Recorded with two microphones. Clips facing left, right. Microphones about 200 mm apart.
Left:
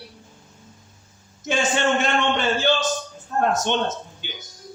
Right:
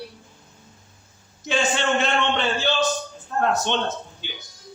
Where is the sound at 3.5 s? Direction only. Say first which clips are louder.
Left 1 dB; 45° left (ahead or behind).